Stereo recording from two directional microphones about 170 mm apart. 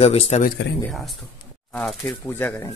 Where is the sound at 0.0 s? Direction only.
35° left (ahead or behind).